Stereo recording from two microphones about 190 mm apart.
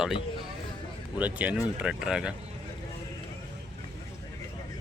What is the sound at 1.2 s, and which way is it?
Speech, 5° right (ahead or behind).